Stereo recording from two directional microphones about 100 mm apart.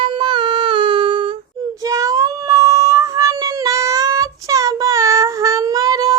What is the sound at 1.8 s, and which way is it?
Child singing, 35° right (ahead or behind).